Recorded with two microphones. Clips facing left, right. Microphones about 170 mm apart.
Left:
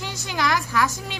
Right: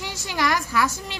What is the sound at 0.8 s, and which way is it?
Speech, centre (ahead or behind).